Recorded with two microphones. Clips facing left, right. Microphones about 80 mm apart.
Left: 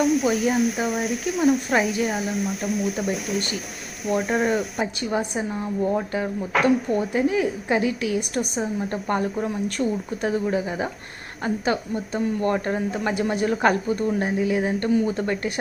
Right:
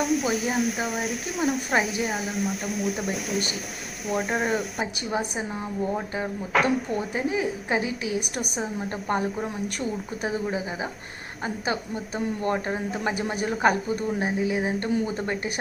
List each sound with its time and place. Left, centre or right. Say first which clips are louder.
0.0 s speech: left 4 dB; centre
7.3 s a woman's voice: left 4 dB; centre